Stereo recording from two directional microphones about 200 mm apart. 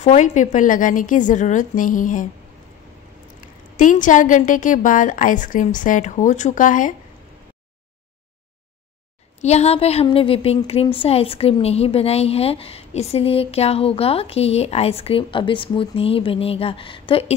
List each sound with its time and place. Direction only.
0.0 s a woman's voice: 35° left (ahead or behind)
3.7 s a woman's voice: 40° left (ahead or behind)
9.4 s a woman's voice: 35° left (ahead or behind)